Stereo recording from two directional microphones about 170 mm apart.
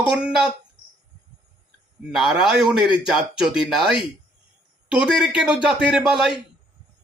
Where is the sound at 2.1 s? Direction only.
5° right (ahead or behind).